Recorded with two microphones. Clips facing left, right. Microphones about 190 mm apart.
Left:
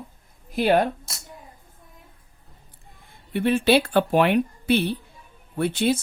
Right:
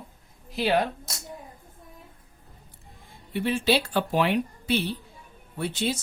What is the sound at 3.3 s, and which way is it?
A man's voice, 55° left (ahead or behind).